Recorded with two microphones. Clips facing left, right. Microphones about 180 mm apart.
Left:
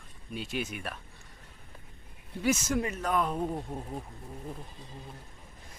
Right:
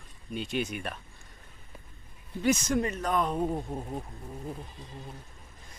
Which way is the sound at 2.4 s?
5° left (ahead or behind).